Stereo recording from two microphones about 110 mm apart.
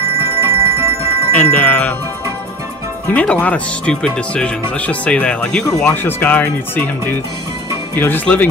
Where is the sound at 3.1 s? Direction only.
10° left (ahead or behind).